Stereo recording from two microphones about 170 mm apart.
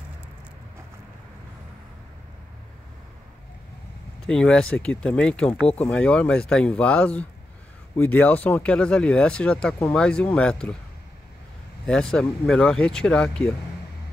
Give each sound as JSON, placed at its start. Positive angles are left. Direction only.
{"t": 4.3, "sound": "speech", "side_deg": 5}
{"t": 11.8, "sound": "speech", "side_deg": 5}